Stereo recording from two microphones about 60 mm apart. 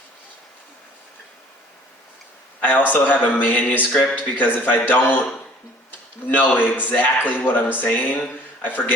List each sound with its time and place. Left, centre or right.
2.6 s a man's voice: left